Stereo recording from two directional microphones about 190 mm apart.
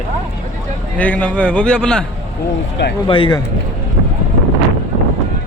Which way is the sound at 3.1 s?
25° left (ahead or behind).